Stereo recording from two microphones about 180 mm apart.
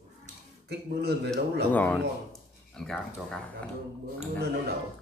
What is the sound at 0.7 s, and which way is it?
A man's voice, 65° right (ahead or behind).